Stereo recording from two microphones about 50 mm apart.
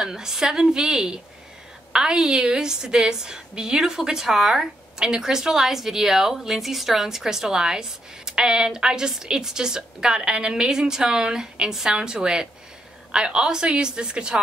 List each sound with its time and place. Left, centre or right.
0.0 s a woman's voice: centre